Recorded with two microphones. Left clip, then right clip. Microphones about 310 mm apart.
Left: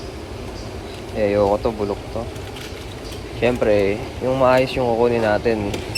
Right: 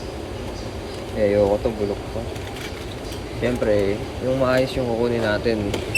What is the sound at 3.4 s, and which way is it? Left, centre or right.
Speech, centre.